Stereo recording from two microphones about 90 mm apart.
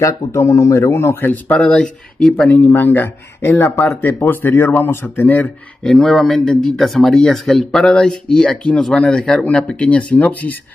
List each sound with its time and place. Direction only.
0.3 s a man's voice: 35° left (ahead or behind); by 2.5 s 10° left (ahead or behind)
2.5 s a man's voice: 20° left (ahead or behind)
5.9 s speech: 5° left (ahead or behind)